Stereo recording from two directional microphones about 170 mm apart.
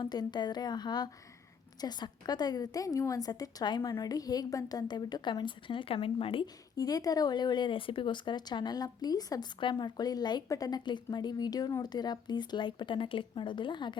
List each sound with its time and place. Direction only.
0.0 s a woman's voice: 25° left (ahead or behind)